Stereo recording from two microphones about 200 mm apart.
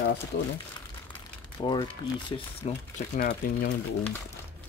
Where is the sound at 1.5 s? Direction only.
20° left (ahead or behind).